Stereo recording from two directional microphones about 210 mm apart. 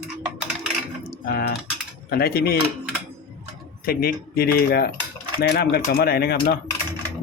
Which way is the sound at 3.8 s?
45° left (ahead or behind).